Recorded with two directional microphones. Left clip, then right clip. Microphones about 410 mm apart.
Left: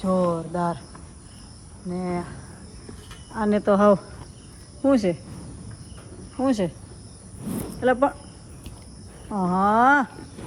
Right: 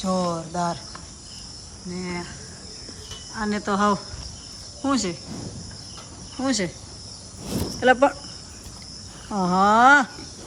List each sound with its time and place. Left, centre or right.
0.0 s cricket: centre
1.9 s cricket: centre
3.3 s cricket: centre
6.4 s cricket: centre
7.8 s cricket: centre
9.3 s cricket: centre